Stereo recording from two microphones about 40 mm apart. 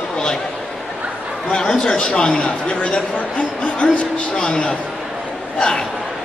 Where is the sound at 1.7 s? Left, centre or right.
Centre.